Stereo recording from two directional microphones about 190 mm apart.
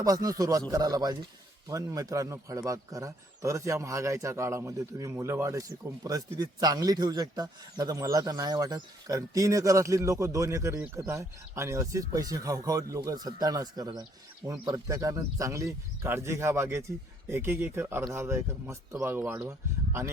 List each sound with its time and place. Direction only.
0.0 s a man's voice: 20° right (ahead or behind)